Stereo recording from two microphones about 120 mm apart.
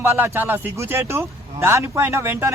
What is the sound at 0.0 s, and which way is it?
Speech, 20° right (ahead or behind).